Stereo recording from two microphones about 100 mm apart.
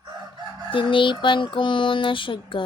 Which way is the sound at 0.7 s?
60° left (ahead or behind).